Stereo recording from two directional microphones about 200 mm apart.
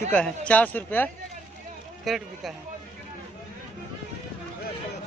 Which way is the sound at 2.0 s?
Centre (ahead or behind).